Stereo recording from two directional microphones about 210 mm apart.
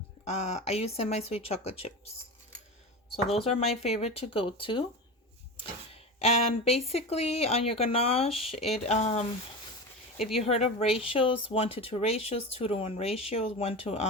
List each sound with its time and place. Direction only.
0.3 s speech: 30° left (ahead or behind)
3.8 s speech: 30° left (ahead or behind)
10.2 s speech: centre (ahead or behind)
10.4 s speech: 30° left (ahead or behind)